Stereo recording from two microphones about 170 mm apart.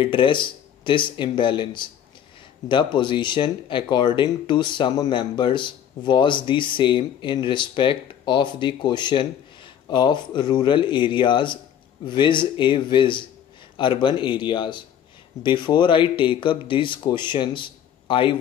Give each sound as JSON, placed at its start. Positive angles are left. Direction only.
{"t": 0.0, "sound": "speech", "side_deg": 30}